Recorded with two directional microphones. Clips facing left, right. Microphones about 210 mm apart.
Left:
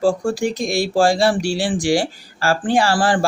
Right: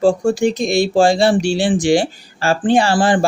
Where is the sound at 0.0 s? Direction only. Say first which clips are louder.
Right 4 dB; 20° right (ahead or behind).